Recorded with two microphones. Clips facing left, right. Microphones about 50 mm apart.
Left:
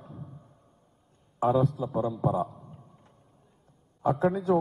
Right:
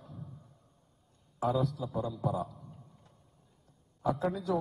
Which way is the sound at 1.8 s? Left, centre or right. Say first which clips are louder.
Left 6 dB; left.